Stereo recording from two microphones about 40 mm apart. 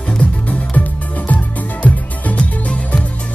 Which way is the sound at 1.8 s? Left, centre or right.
Left.